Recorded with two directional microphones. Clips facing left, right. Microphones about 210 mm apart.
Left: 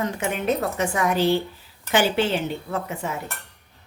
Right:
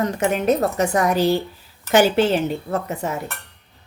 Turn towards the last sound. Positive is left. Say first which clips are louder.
# right 4 dB
turn(degrees=-40)  # may be behind; listen again after turning